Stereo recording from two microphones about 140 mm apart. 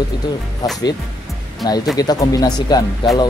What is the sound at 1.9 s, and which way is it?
Speech, 25° left (ahead or behind).